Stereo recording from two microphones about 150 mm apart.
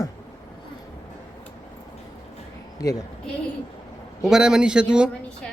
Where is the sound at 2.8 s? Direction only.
20° left (ahead or behind).